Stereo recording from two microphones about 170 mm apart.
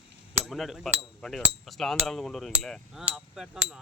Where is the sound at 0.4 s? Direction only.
Centre (ahead or behind).